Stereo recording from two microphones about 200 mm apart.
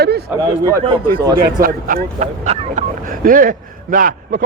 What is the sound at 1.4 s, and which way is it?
A man's voice, 45° right (ahead or behind).